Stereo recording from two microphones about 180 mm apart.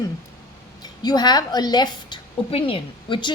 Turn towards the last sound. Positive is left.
turn(degrees=25)  # may be behind; listen again after turning